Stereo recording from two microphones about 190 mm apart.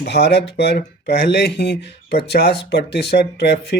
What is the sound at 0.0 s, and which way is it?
Speech, 60° left (ahead or behind).